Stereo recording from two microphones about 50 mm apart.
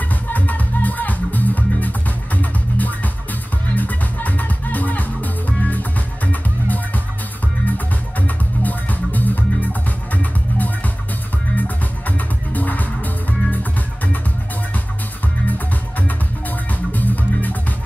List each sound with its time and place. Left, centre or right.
0.1 s music: left
12.5 s music: left
15.4 s music: left